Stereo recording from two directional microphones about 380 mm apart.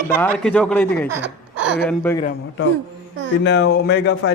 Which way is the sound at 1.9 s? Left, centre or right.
Centre.